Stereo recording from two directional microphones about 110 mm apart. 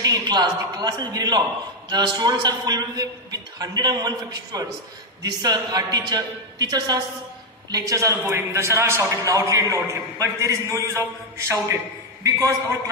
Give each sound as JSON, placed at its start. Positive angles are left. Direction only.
{"t": 0.0, "sound": "a man's voice", "side_deg": -35}